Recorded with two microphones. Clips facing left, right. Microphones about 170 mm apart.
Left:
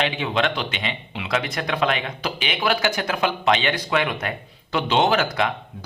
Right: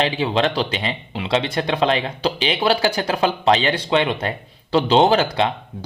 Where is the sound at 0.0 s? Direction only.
30° right (ahead or behind).